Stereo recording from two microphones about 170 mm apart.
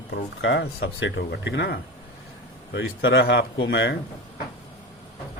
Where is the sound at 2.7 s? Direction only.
90° left.